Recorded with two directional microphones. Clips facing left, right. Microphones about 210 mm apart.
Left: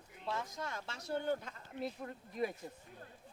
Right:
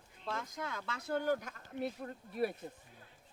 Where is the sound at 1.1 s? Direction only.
90° right; by 1.9 s 70° right (ahead or behind).